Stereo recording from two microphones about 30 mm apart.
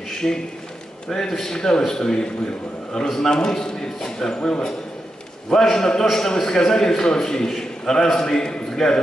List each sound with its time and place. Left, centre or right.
0.2 s speech: left
1.0 s a man's voice: centre
3.3 s a man's voice: left